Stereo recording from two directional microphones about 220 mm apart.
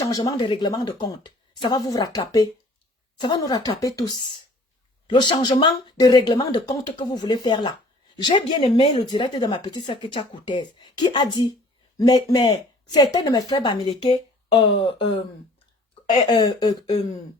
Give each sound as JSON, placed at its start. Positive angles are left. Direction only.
{"t": 0.0, "sound": "a woman's voice", "side_deg": 15}
{"t": 16.0, "sound": "speech", "side_deg": 20}